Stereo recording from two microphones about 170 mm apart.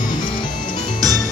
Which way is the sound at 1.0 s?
20° right (ahead or behind).